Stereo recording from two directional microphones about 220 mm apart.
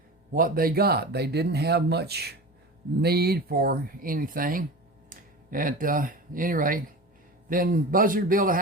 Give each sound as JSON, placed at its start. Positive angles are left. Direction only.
{"t": 0.3, "sound": "a man's voice", "side_deg": -40}